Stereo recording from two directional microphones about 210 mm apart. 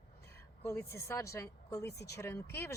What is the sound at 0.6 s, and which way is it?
A man's voice, 10° left (ahead or behind).